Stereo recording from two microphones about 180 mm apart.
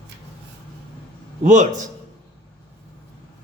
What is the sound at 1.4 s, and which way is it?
Speech, 45° right (ahead or behind).